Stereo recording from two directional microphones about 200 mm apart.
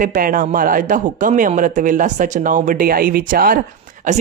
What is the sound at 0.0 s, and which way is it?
Speech, 40° right (ahead or behind).